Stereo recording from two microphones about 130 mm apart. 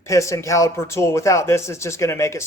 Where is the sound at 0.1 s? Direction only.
25° left (ahead or behind).